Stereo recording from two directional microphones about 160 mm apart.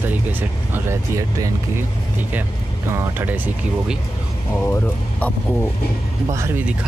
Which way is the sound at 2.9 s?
10° right (ahead or behind).